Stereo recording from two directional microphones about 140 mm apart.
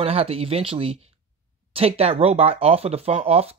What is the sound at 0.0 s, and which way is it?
Speech, 45° right (ahead or behind).